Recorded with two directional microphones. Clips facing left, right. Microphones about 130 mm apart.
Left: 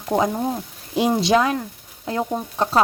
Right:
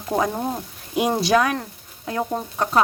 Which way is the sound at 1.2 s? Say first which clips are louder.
Even; 25° left (ahead or behind).